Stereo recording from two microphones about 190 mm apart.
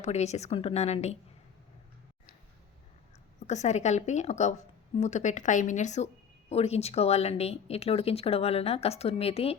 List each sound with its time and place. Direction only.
0.0 s speech: 35° left (ahead or behind)
3.4 s speech: 35° left (ahead or behind)